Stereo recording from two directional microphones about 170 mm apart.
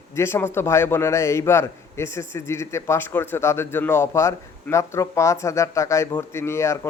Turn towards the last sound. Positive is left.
turn(degrees=15)  # may be behind; listen again after turning